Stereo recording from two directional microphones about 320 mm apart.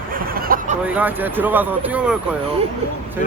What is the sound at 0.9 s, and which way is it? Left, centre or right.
Speech, centre.